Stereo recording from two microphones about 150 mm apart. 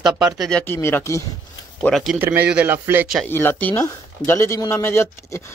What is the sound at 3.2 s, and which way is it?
Speech, 15° left (ahead or behind).